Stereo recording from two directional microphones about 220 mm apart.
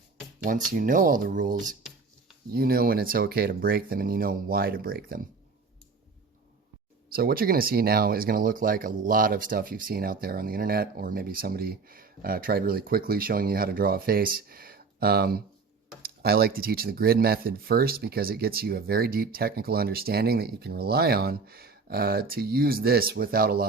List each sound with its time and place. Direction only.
0.4 s speech: 35° right (ahead or behind)
7.1 s speech: 45° right (ahead or behind)